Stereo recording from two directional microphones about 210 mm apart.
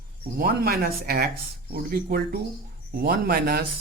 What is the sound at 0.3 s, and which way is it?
Speech, 45° right (ahead or behind).